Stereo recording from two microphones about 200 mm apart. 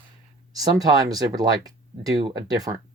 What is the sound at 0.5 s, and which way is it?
Speech, 20° right (ahead or behind).